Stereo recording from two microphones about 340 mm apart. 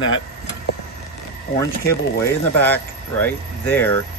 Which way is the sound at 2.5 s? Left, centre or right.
Centre.